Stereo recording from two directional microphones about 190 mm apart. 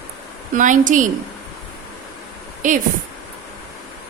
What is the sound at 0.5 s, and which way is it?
Speech, 45° right (ahead or behind).